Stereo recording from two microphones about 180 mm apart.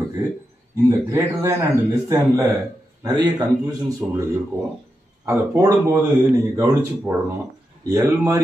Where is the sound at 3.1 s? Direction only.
20° right (ahead or behind).